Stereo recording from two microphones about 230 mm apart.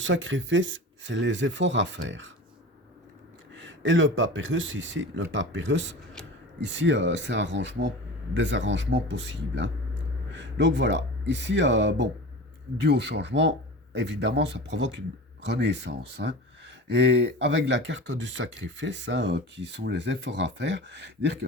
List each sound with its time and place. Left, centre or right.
0.0 s speech: right
3.5 s speech: right